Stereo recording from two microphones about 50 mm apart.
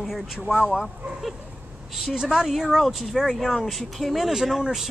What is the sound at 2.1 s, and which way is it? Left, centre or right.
Speech, centre.